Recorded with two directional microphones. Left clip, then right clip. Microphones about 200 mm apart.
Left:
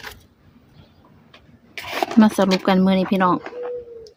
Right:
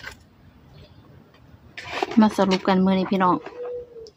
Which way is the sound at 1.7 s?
50° left (ahead or behind).